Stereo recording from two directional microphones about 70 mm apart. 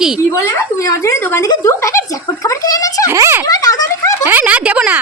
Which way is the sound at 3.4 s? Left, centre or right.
Left.